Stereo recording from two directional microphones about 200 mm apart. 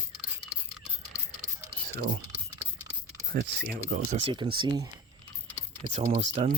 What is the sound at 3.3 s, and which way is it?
Speech, 55° right (ahead or behind).